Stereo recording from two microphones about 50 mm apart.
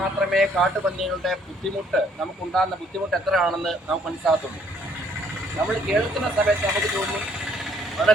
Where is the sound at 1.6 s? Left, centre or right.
Centre.